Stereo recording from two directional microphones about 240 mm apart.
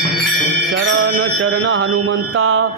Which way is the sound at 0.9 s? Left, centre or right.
Right.